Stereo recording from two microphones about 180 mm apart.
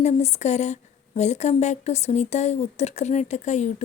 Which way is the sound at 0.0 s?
40° left (ahead or behind).